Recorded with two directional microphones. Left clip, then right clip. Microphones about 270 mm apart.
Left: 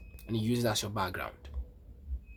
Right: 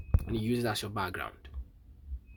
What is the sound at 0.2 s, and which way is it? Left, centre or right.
Speech, centre.